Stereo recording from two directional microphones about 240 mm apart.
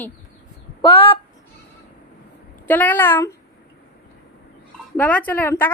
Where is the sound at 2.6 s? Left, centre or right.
Centre.